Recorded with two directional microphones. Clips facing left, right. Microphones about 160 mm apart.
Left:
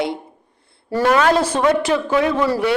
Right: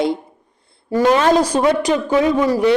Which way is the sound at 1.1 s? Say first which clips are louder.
Right 1 dB; 30° right (ahead or behind).